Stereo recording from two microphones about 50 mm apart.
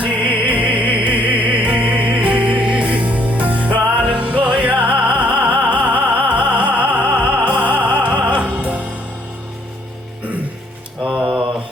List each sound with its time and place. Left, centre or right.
0.0 s music: right
11.0 s mantra: centre